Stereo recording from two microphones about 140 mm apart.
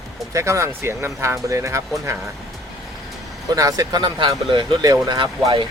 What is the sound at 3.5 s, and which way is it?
Speech, 25° right (ahead or behind).